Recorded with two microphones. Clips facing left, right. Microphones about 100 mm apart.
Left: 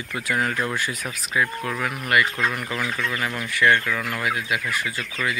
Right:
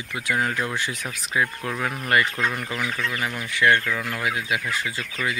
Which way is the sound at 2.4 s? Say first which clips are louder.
Left 1 dB; 10° left (ahead or behind).